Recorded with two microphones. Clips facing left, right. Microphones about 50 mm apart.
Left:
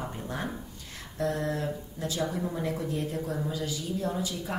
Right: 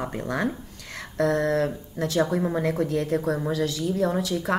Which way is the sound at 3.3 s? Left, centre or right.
Right.